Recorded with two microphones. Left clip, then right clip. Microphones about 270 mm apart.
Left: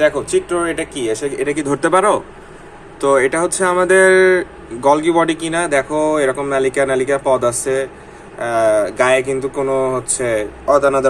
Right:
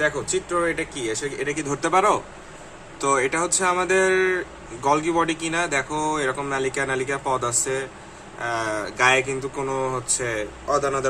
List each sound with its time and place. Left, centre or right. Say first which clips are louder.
0.5 s speech: left 5 dB; centre